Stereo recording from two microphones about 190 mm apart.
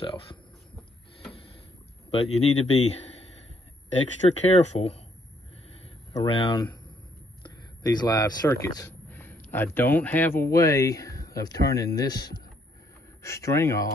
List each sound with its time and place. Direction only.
0.0 s speech: 25° left (ahead or behind)
2.0 s speech: 35° left (ahead or behind)
4.2 s speech: 30° left (ahead or behind)
6.2 s speech: 25° left (ahead or behind)